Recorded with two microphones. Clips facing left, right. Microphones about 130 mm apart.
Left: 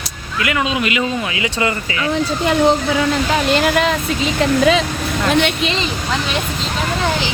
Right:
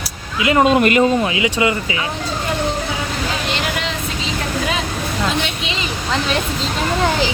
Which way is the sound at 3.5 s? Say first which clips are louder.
Left 8 dB; 50° left (ahead or behind).